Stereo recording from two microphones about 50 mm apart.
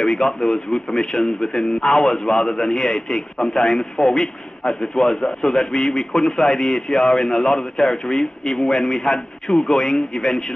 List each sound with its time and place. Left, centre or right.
0.0 s a man's voice: centre
3.3 s a man's voice: centre